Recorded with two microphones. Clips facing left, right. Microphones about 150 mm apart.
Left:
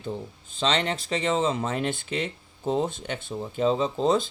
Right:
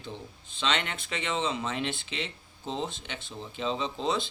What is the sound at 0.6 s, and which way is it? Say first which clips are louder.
Speech: left 5 dB; 35° left (ahead or behind).